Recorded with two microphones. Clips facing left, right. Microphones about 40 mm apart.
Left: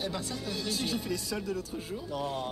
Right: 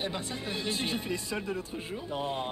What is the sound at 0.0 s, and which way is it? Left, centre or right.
Speech, right.